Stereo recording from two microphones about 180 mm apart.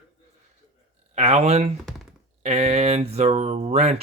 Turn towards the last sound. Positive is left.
turn(degrees=-35)  # may be behind; listen again after turning